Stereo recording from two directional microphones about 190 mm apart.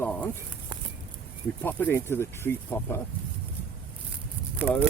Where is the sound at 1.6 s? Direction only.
10° left (ahead or behind).